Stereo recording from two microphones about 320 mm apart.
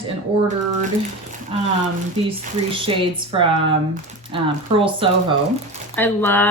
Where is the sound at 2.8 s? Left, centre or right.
Centre.